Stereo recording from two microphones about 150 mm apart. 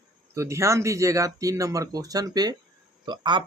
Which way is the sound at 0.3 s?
20° right (ahead or behind).